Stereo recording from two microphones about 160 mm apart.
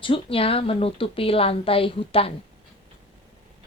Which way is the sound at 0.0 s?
35° left (ahead or behind).